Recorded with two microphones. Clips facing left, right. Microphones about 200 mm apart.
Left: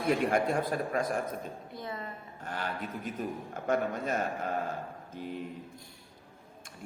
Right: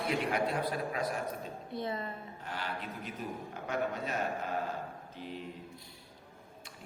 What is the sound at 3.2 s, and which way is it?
A man's voice, 45° left (ahead or behind).